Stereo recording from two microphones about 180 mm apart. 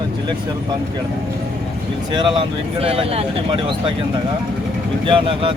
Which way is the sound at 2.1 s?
30° right (ahead or behind).